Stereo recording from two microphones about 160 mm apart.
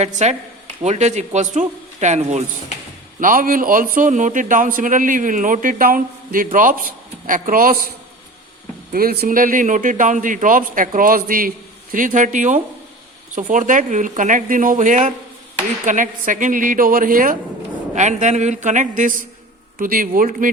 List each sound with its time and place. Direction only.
0.0 s speech: 45° right (ahead or behind)
3.2 s a man's voice: 60° right (ahead or behind)
8.9 s a man's voice: 65° right (ahead or behind)
17.9 s a man's voice: 50° right (ahead or behind)